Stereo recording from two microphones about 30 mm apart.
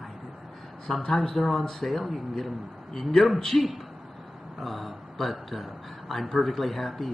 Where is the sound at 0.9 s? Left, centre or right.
Centre.